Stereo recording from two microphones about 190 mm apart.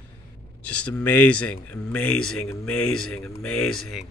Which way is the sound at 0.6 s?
5° left (ahead or behind).